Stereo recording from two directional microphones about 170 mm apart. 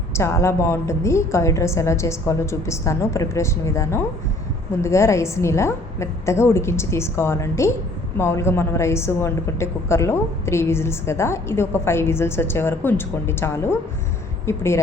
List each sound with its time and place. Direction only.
0.1 s a woman's voice: 15° left (ahead or behind)